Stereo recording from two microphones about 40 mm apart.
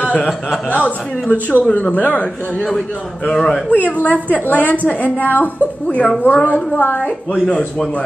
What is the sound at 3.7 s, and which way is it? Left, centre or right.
Speech, left.